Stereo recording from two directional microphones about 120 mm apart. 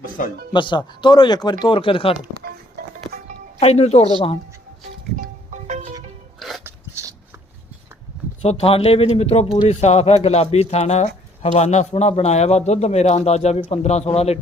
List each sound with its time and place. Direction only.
0.5 s speech: 40° left (ahead or behind)
3.6 s a man's voice: 60° left (ahead or behind)
5.1 s music: 90° right
6.7 s a sound: 25° right (ahead or behind)
8.4 s a man's voice: 60° left (ahead or behind)